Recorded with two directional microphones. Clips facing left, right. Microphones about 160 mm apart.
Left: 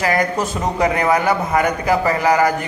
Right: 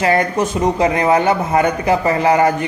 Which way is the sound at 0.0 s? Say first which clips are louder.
Right 3 dB; 25° right (ahead or behind).